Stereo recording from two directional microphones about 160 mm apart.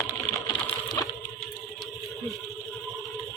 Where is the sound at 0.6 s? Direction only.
25° left (ahead or behind).